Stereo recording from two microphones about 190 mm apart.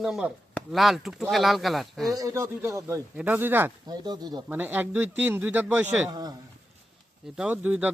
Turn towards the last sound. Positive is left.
turn(degrees=-10)  # may be behind; listen again after turning